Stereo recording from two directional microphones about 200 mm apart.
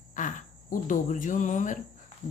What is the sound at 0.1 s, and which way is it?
A woman's voice, 40° left (ahead or behind).